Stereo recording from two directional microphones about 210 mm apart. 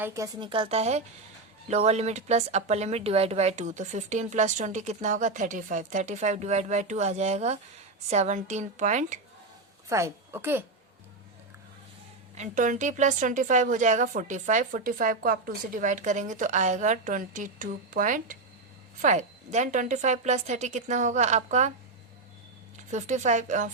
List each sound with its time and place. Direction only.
0.0 s a woman's voice: 15° right (ahead or behind); by 9.1 s 35° right (ahead or behind)
9.9 s a woman's voice: 10° right (ahead or behind)
12.3 s a woman's voice: 35° right (ahead or behind)
22.9 s a woman's voice: 35° right (ahead or behind)